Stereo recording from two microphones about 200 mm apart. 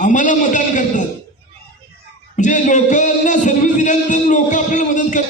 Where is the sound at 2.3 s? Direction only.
40° left (ahead or behind).